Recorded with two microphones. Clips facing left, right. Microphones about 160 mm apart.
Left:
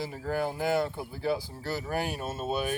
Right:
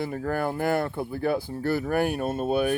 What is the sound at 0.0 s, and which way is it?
Speech, 55° right (ahead or behind).